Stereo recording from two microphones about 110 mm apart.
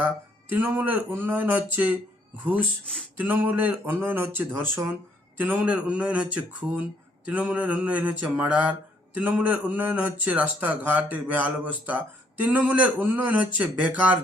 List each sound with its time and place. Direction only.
0.5 s a man's voice: 15° right (ahead or behind)
3.2 s a man's voice: 15° right (ahead or behind)